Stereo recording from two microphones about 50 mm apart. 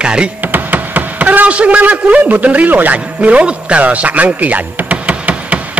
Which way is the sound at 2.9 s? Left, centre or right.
Right.